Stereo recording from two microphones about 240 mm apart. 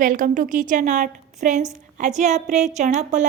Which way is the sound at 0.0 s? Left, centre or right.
Right.